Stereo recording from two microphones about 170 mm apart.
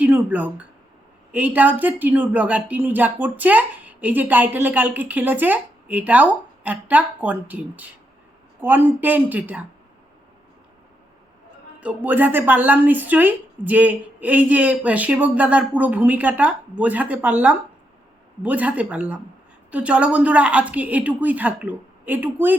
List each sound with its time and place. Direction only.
0.0 s speech: 10° right (ahead or behind)
11.8 s speech: 10° right (ahead or behind)